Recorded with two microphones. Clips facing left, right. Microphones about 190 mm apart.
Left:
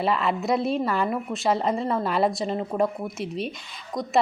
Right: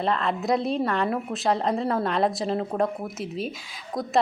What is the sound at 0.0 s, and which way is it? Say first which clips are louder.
A woman's voice: left 1 dB; 5° left (ahead or behind).